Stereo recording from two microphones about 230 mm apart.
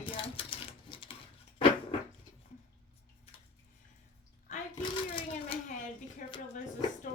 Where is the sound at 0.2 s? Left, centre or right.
Left.